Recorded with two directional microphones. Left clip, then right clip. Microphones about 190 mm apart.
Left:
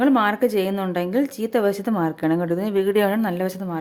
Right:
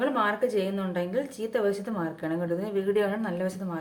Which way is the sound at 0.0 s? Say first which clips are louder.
Left 7 dB; 55° left (ahead or behind).